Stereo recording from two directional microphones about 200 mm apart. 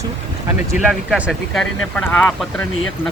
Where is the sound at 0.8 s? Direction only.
5° right (ahead or behind).